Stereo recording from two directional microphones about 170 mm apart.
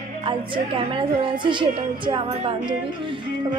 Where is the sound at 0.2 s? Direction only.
30° right (ahead or behind).